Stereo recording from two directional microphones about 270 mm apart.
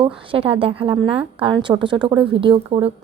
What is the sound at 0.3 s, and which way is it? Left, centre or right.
A woman's voice, centre.